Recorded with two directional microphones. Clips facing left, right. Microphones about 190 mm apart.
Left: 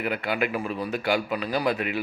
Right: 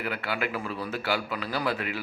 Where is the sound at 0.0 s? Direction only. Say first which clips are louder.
Left 4 dB; 20° left (ahead or behind).